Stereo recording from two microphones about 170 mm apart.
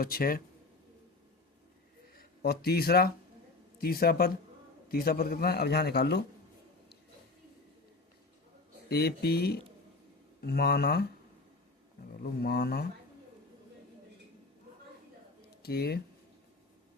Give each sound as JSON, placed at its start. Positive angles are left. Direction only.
{"t": 0.0, "sound": "speech", "side_deg": 60}
{"t": 2.1, "sound": "a man's voice", "side_deg": 65}
{"t": 8.9, "sound": "a man's voice", "side_deg": 70}
{"t": 12.2, "sound": "speech", "side_deg": 65}
{"t": 15.6, "sound": "a man's voice", "side_deg": 70}